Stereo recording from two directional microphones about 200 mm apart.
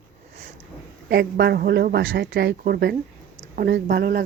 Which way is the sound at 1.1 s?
55° right (ahead or behind).